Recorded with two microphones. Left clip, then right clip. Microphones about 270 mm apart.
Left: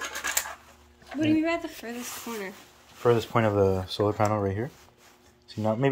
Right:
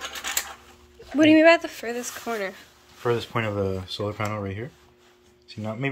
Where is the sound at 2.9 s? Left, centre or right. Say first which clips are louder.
Left 2 dB; left.